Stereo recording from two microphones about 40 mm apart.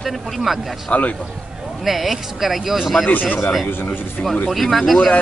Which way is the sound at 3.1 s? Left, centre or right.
Left.